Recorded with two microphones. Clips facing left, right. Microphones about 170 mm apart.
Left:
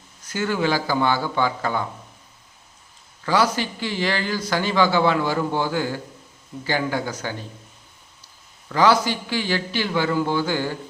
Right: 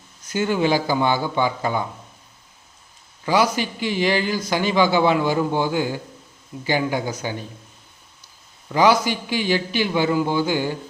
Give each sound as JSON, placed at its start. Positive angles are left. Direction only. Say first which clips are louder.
{"t": 0.3, "sound": "a man's voice", "louder": "right 3 dB", "side_deg": -20}
{"t": 3.2, "sound": "a man's voice", "louder": "right 1 dB", "side_deg": -15}
{"t": 8.7, "sound": "a man's voice", "louder": "right 1 dB", "side_deg": -15}